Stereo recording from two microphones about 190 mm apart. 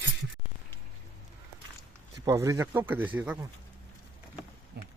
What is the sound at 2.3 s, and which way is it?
Speech, 15° right (ahead or behind).